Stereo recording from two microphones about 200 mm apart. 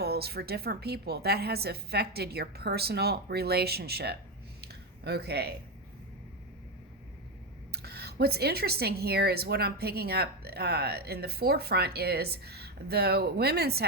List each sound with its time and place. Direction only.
0.0 s speech: 50° right (ahead or behind)
4.6 s a sound: 55° right (ahead or behind)
7.7 s speech: 50° right (ahead or behind)